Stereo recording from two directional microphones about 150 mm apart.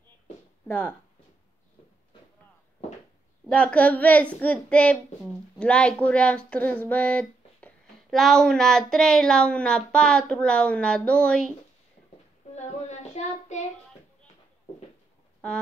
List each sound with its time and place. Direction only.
0.7 s speech: 10° left (ahead or behind)
3.4 s a sound: 5° left (ahead or behind)
12.5 s child singing: 50° left (ahead or behind)